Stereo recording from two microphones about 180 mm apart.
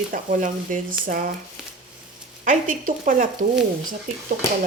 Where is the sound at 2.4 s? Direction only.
45° right (ahead or behind).